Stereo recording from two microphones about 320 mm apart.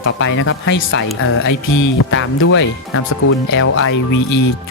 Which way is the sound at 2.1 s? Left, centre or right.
Left.